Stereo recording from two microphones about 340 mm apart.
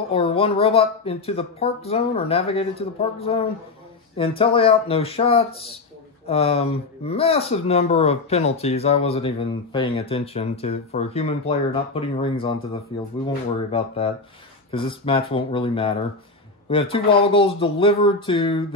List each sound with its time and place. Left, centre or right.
0.1 s speech: centre